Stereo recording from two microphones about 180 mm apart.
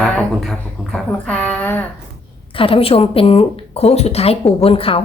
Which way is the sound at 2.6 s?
30° left (ahead or behind).